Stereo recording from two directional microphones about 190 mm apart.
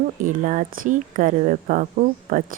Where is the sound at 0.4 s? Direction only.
40° right (ahead or behind).